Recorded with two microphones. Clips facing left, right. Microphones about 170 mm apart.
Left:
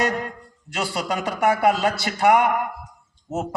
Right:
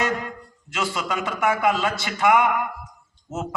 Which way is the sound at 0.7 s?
35° left (ahead or behind).